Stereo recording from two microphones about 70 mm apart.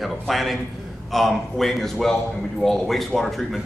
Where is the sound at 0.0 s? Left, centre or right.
Centre.